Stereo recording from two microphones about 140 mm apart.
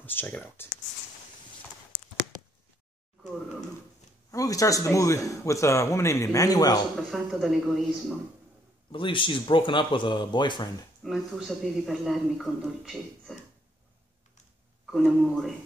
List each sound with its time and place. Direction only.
0.0 s speech: 15° left (ahead or behind)
4.3 s a man's voice: 25° left (ahead or behind)
7.0 s speech: centre (ahead or behind)
8.9 s speech: 35° left (ahead or behind)
11.1 s speech: centre (ahead or behind)
14.9 s speech: centre (ahead or behind)